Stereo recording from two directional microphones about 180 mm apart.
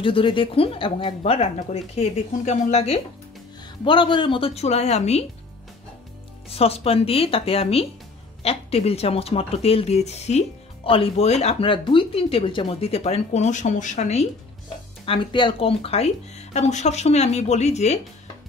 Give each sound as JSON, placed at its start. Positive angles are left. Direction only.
{"t": 0.0, "sound": "speech", "side_deg": 30}
{"t": 6.5, "sound": "speech", "side_deg": 35}
{"t": 15.0, "sound": "speech", "side_deg": 25}